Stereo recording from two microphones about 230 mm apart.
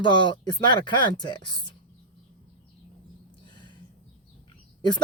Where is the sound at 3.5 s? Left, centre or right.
Centre.